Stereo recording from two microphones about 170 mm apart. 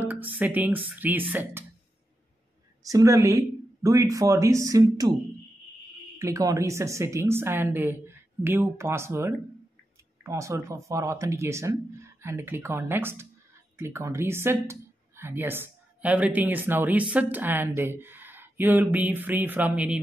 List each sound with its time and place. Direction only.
0.1 s speech: 10° right (ahead or behind)
2.8 s speech: 20° right (ahead or behind)
6.1 s speech: 20° right (ahead or behind)